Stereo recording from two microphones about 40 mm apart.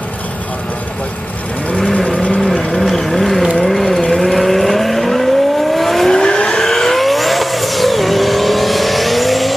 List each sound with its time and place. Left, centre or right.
2.0 s vehicle: centre
2.4 s a sound: centre
3.5 s vehicle: centre
6.1 s vehicle: centre
6.6 s vehicle: centre